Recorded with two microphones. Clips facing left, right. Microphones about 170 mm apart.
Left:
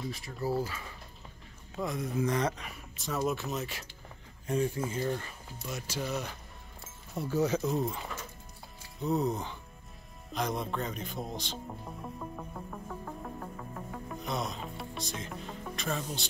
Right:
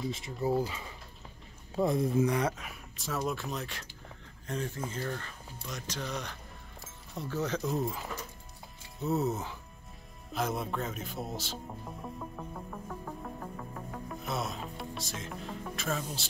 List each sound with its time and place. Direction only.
0.1 s speech: 20° right (ahead or behind)
1.8 s speech: 30° right (ahead or behind)
2.2 s speech: 10° right (ahead or behind)
12.2 s music: centre (ahead or behind)